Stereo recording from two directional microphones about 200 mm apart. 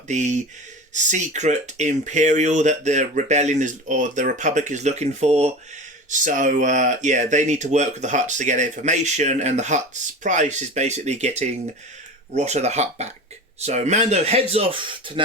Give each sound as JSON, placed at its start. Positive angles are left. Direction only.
{"t": 0.1, "sound": "speech", "side_deg": -35}